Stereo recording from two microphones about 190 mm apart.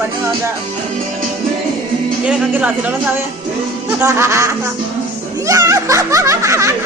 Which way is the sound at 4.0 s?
15° right (ahead or behind).